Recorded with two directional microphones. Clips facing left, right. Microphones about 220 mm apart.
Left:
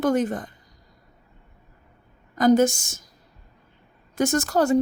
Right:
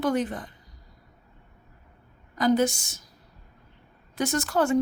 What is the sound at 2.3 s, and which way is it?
Speech, 45° left (ahead or behind).